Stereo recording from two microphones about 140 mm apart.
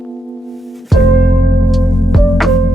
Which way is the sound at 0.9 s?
Centre (ahead or behind).